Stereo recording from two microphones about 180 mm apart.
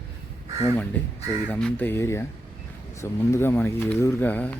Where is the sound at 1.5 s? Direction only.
5° left (ahead or behind).